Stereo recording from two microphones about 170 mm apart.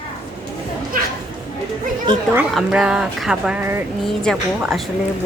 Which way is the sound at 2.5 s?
5° right (ahead or behind).